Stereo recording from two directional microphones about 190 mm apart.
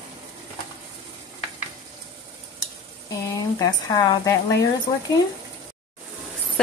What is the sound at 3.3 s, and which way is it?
Speech, 20° left (ahead or behind).